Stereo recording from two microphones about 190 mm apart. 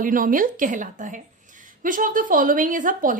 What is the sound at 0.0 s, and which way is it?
A woman's voice, 45° right (ahead or behind).